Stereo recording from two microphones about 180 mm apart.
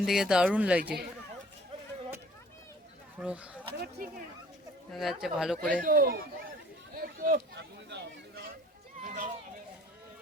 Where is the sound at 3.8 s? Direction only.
50° right (ahead or behind).